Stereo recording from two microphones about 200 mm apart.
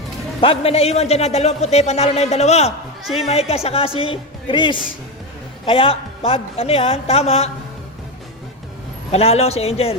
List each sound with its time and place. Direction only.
0.4 s speech: 30° left (ahead or behind)
3.0 s a woman's voice: centre (ahead or behind)
3.5 s a man's voice: 30° left (ahead or behind)
9.1 s speech: 30° left (ahead or behind)